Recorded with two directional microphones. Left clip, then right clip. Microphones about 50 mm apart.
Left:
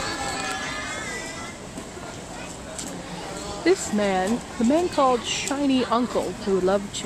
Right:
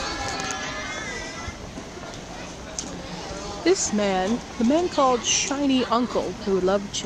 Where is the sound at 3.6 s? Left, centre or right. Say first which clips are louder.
Even; right.